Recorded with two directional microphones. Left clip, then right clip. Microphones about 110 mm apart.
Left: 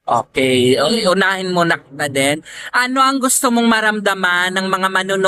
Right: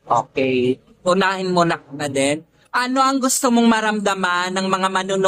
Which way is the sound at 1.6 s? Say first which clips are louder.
Left 4 dB; 30° left (ahead or behind).